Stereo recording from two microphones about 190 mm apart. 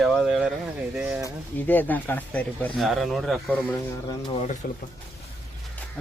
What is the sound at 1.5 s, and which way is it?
Speech, 10° left (ahead or behind).